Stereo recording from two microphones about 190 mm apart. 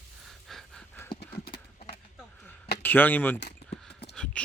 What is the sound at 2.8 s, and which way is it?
Speech, 10° left (ahead or behind).